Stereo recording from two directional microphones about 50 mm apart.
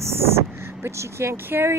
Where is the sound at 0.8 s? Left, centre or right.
Right.